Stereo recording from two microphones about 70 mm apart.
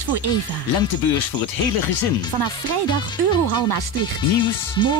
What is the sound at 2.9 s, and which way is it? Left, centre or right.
Speech, left.